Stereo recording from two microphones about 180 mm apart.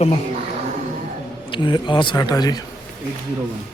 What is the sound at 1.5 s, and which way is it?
Speech, 25° left (ahead or behind).